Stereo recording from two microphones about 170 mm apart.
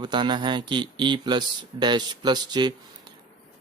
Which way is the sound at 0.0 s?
25° right (ahead or behind).